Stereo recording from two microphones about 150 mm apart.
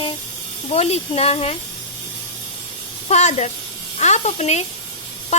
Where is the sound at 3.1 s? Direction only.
50° left (ahead or behind).